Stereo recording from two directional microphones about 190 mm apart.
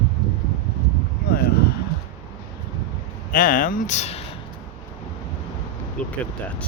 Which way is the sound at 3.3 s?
45° left (ahead or behind).